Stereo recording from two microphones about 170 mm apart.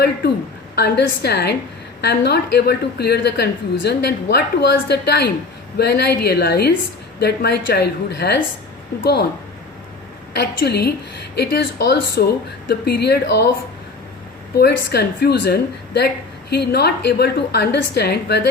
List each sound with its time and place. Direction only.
0.8 s a woman's voice: 70° left (ahead or behind)
10.3 s a woman's voice: 75° left (ahead or behind)
14.5 s a woman's voice: 70° left (ahead or behind)